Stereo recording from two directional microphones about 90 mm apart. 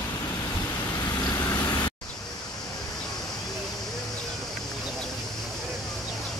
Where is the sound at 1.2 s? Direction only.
45° left (ahead or behind).